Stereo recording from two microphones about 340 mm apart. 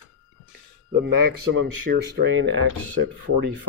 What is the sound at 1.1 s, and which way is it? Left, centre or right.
Speech, right.